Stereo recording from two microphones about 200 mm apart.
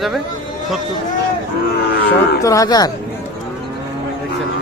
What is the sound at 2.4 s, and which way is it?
Speech, 15° left (ahead or behind).